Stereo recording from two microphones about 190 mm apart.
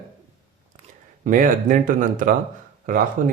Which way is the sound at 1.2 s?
45° right (ahead or behind).